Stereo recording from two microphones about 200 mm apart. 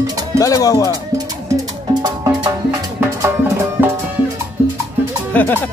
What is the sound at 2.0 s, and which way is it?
Music, 20° right (ahead or behind).